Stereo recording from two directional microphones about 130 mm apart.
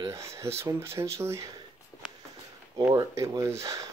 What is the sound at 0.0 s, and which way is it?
Speech, 20° right (ahead or behind).